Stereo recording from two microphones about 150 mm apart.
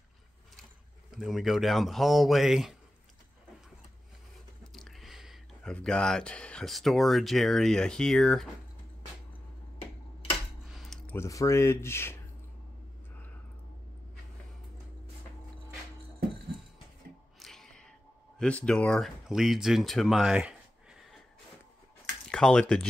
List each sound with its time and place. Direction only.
1.1 s speech: 5° right (ahead or behind)
4.7 s speech: centre (ahead or behind)
10.7 s a sound: centre (ahead or behind)
11.1 s speech: 20° left (ahead or behind)
17.4 s a sound: centre (ahead or behind)
18.4 s speech: 5° left (ahead or behind)
22.3 s speech: 5° left (ahead or behind)